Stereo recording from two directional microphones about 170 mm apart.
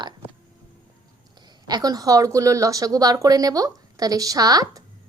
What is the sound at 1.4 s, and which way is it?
A woman's voice, 25° right (ahead or behind).